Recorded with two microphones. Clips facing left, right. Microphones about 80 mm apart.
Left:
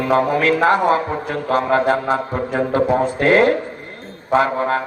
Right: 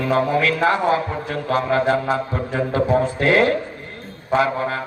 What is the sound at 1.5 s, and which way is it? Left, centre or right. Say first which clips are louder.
Mantra: left 2 dB; left.